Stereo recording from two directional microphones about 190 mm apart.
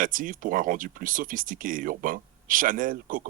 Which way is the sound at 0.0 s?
45° right (ahead or behind).